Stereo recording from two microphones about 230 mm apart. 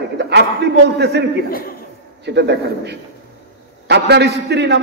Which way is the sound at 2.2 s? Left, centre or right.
Right.